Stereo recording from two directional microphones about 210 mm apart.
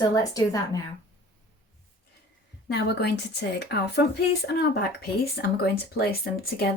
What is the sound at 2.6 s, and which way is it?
Speech, 50° left (ahead or behind).